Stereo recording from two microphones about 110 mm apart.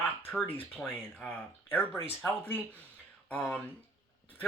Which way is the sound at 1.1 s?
15° left (ahead or behind).